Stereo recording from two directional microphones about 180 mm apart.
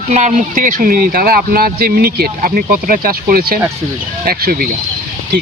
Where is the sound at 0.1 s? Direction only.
40° right (ahead or behind).